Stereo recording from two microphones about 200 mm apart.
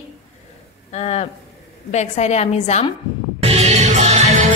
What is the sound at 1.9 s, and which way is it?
Speech, 35° left (ahead or behind).